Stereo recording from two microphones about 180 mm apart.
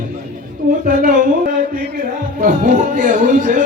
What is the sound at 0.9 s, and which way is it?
Music, 50° right (ahead or behind).